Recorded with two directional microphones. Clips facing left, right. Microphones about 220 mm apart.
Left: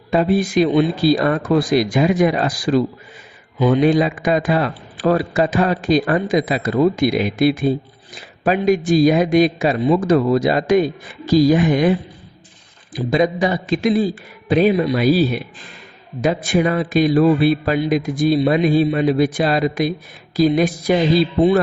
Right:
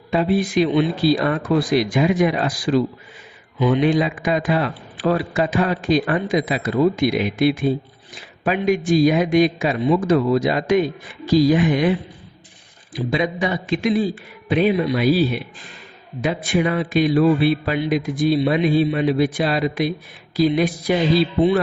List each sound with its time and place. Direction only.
0.1 s a man's voice: 45° left (ahead or behind)